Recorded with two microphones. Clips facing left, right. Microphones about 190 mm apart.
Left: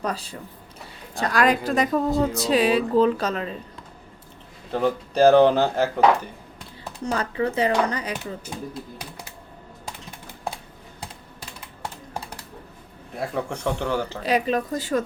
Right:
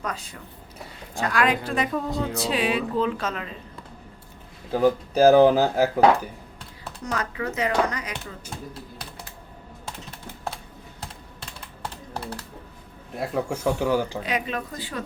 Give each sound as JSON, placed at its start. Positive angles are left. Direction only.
{"t": 0.0, "sound": "a woman's voice", "side_deg": 35}
{"t": 4.7, "sound": "speech", "side_deg": -5}
{"t": 7.0, "sound": "a woman's voice", "side_deg": 30}
{"t": 13.1, "sound": "speech", "side_deg": 0}
{"t": 14.3, "sound": "a woman's voice", "side_deg": 35}